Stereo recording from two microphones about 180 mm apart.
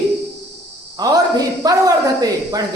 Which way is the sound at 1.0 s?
20° right (ahead or behind).